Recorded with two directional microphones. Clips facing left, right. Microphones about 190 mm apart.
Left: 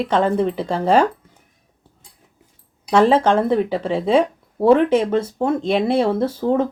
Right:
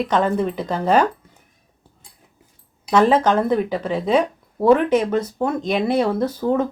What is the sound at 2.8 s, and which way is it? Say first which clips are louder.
Speech: left 1 dB; 30° left (ahead or behind).